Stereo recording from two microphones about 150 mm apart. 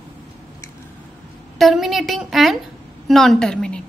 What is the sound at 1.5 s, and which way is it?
A woman's voice, centre (ahead or behind).